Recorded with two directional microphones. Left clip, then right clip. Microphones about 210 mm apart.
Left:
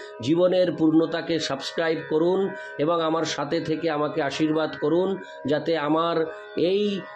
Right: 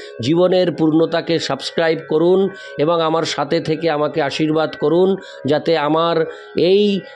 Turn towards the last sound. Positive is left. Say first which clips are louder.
# right 9 dB
turn(degrees=-45)  # may be behind; listen again after turning